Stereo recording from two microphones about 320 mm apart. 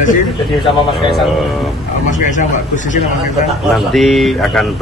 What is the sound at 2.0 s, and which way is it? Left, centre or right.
Speech, left.